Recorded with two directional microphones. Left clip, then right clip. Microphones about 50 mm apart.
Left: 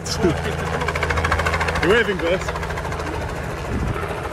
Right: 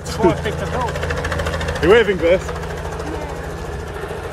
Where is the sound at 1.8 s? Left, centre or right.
Left.